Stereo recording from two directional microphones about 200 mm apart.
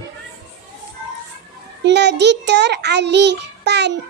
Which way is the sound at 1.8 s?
60° right (ahead or behind).